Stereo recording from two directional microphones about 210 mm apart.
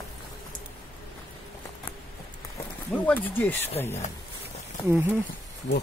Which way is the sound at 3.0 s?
10° left (ahead or behind).